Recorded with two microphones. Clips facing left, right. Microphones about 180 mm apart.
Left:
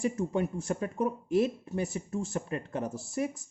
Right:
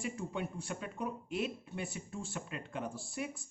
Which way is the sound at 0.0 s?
45° left (ahead or behind).